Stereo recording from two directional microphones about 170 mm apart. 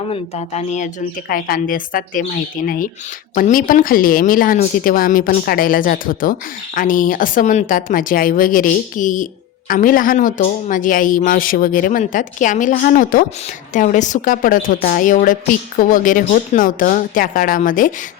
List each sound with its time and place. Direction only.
0.1 s speech: 40° left (ahead or behind)
1.3 s a woman's voice: 55° left (ahead or behind)